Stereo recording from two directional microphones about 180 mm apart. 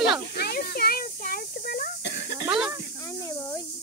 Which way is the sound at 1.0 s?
50° left (ahead or behind).